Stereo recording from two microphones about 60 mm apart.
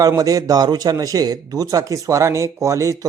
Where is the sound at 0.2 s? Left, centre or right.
Right.